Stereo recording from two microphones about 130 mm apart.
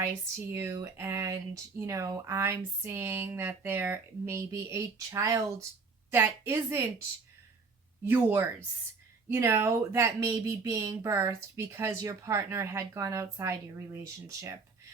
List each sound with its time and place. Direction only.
0.0 s speech: 20° right (ahead or behind)
8.0 s speech: 15° right (ahead or behind)